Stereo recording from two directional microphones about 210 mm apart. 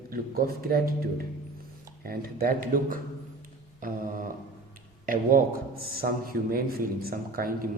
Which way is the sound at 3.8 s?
40° right (ahead or behind).